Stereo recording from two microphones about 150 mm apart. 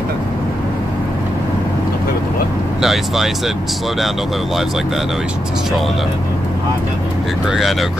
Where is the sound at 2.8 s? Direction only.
Centre (ahead or behind).